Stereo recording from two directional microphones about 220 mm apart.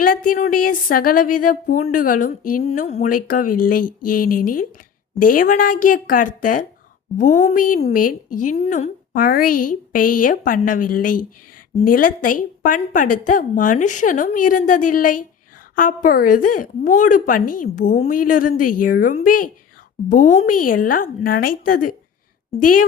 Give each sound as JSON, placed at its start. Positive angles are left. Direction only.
{"t": 0.0, "sound": "a woman's voice", "side_deg": 40}